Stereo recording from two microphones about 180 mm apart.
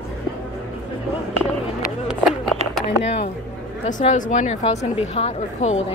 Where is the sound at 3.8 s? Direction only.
40° left (ahead or behind).